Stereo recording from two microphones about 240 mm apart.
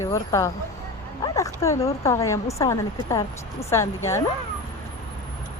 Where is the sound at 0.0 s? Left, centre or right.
Centre.